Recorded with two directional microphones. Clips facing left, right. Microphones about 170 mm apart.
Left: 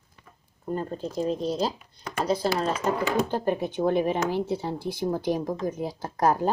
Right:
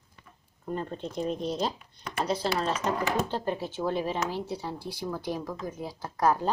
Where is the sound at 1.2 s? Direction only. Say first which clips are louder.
Left 3 dB; 35° left (ahead or behind).